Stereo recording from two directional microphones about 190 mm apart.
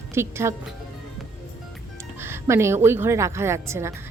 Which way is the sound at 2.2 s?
15° right (ahead or behind).